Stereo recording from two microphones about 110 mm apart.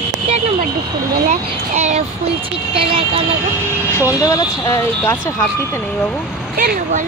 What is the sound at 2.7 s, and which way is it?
Speech, 55° right (ahead or behind).